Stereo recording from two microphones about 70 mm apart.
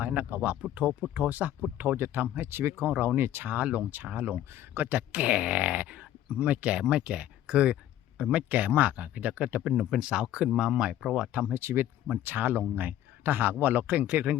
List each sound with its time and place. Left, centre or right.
0.0 s speech: right
11.5 s speech: right